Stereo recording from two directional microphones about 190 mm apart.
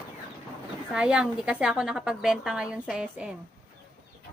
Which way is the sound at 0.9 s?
5° right (ahead or behind).